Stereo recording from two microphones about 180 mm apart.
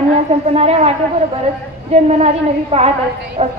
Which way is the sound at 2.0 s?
35° right (ahead or behind).